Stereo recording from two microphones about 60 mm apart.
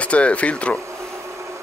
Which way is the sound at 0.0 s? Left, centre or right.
Left.